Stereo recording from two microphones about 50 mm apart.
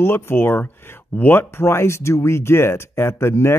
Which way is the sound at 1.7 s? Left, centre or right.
Left.